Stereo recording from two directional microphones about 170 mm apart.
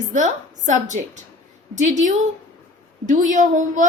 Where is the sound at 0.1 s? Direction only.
45° right (ahead or behind).